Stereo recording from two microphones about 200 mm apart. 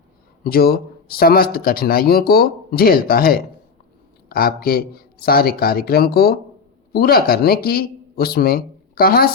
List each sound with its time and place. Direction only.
0.4 s speech: 50° left (ahead or behind)